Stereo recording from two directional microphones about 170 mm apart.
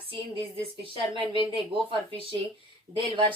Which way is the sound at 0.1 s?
30° right (ahead or behind).